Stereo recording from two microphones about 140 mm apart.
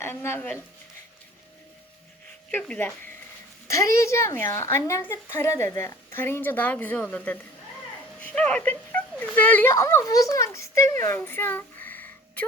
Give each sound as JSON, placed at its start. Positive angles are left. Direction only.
{"t": 0.0, "sound": "a woman's voice", "side_deg": 15}
{"t": 2.5, "sound": "a woman's voice", "side_deg": 10}
{"t": 11.0, "sound": "a sound", "side_deg": 15}